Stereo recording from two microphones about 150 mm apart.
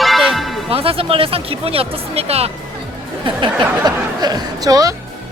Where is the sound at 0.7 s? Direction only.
40° right (ahead or behind).